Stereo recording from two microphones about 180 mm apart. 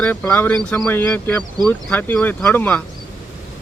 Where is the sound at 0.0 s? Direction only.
10° left (ahead or behind).